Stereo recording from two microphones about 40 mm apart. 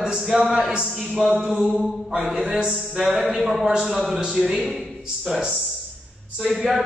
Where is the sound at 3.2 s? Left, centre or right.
Centre.